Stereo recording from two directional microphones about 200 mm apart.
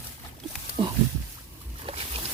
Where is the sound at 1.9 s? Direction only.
30° right (ahead or behind).